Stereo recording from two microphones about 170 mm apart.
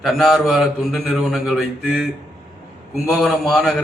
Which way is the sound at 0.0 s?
Centre (ahead or behind).